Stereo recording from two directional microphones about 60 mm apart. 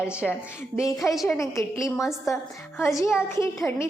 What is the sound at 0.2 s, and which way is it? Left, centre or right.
Speech, centre.